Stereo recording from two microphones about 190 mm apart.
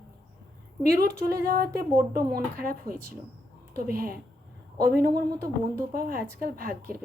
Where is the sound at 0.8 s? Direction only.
55° right (ahead or behind).